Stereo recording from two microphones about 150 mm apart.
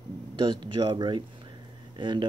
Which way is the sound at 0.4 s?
35° right (ahead or behind).